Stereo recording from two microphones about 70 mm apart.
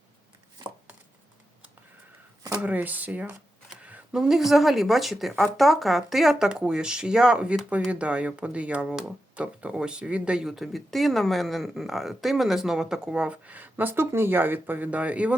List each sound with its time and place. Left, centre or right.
2.6 s speech: right
4.1 s speech: centre